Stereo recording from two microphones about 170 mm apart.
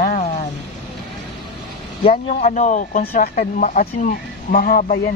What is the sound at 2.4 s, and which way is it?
Speech, 45° left (ahead or behind).